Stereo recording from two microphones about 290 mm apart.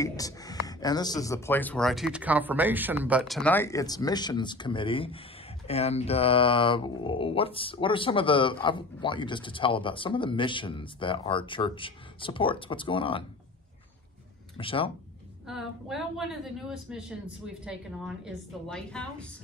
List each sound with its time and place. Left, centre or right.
0.0 s speech: centre
14.6 s speech: centre
15.4 s a woman's voice: centre